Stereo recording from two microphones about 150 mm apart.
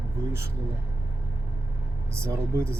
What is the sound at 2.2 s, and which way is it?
Speech, 20° right (ahead or behind).